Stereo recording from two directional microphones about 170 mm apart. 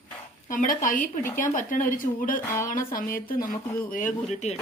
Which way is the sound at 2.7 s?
55° left (ahead or behind).